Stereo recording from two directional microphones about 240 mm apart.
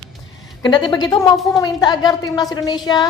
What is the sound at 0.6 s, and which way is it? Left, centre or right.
A woman's voice, centre.